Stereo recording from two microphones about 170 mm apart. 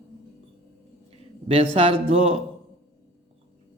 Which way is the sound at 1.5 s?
35° right (ahead or behind).